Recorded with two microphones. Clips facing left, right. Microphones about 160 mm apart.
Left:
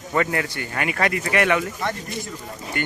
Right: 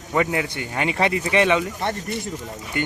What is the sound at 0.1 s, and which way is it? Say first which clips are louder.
Speech: right 1 dB; 15° right (ahead or behind).